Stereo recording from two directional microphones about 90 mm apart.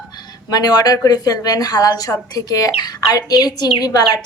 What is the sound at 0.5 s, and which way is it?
A woman's voice, 45° left (ahead or behind).